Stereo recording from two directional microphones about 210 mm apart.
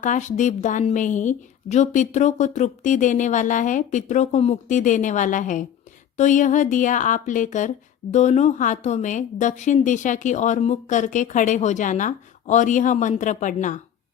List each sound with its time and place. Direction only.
0.0 s a woman's voice: 35° left (ahead or behind)